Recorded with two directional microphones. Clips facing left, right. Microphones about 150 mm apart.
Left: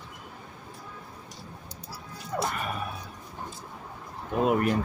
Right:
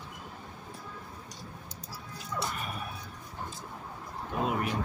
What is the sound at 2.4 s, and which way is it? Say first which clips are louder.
Music: left 7 dB; 85° left.